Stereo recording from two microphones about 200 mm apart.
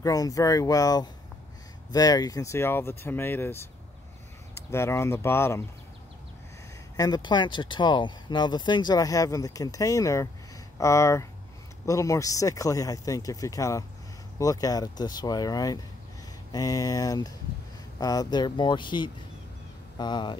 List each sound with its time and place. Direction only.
0.0 s speech: 15° left (ahead or behind)
7.0 s speech: 20° left (ahead or behind)